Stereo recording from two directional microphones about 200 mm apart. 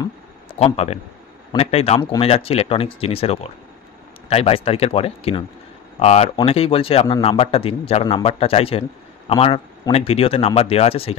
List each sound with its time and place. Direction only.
0.6 s a man's voice: 30° left (ahead or behind)